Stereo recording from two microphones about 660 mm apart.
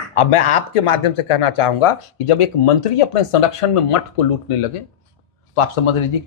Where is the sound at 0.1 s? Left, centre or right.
Left.